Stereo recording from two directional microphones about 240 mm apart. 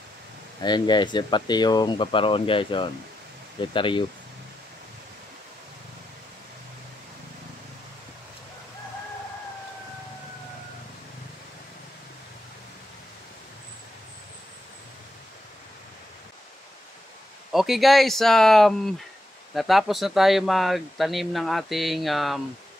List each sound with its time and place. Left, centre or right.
0.6 s speech: centre
17.5 s speech: centre